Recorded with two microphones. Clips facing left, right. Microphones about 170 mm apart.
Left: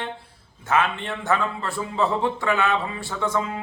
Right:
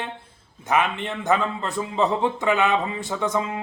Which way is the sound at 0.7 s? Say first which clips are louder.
Even; 15° right (ahead or behind).